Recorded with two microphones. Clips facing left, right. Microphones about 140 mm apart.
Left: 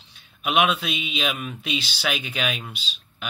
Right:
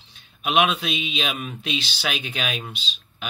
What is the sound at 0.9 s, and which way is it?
Speech, centre (ahead or behind).